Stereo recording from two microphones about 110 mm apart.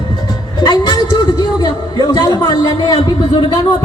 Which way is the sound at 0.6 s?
35° left (ahead or behind).